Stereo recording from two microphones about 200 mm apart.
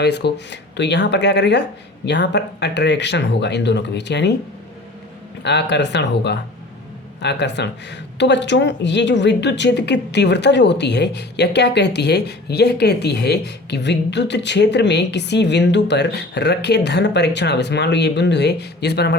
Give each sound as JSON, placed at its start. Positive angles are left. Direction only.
{"t": 0.0, "sound": "speech", "side_deg": 55}
{"t": 5.4, "sound": "speech", "side_deg": 60}